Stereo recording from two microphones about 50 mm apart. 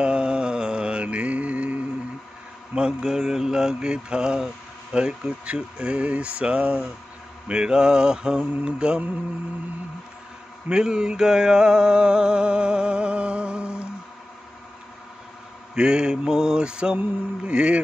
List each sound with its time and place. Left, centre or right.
0.0 s mantra: centre
2.7 s mantra: centre
4.9 s speech: centre
7.4 s mantra: centre
10.7 s a sound: centre
15.7 s mantra: centre
17.5 s speech: right